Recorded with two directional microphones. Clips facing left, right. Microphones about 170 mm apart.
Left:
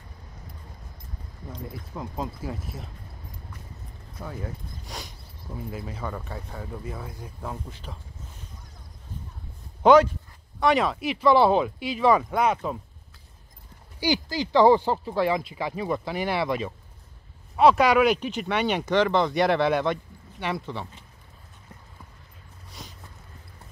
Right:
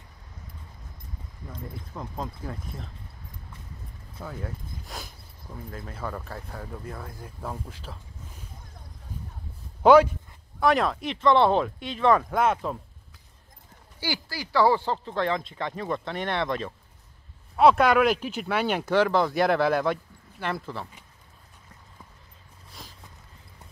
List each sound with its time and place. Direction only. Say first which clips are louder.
1.5 s speech: left 2 dB; 5° left (ahead or behind)
4.2 s speech: left 1 dB; centre (ahead or behind)
9.8 s speech: even; 5° right (ahead or behind)
13.9 s speech: left 7 dB; 20° left (ahead or behind); by 20.9 s centre (ahead or behind)
22.7 s a sound: left 2 dB; centre (ahead or behind)